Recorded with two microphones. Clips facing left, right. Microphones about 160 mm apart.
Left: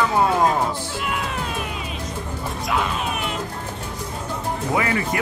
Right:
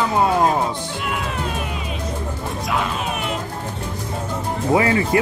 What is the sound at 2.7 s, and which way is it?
Music, centre (ahead or behind).